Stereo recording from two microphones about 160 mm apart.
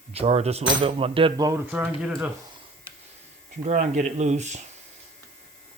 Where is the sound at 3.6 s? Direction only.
50° right (ahead or behind).